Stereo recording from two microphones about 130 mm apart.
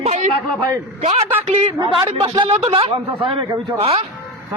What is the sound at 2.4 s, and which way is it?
A man's voice, 45° right (ahead or behind).